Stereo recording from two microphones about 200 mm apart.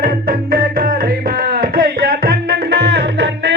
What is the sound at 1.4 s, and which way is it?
Music, 45° right (ahead or behind).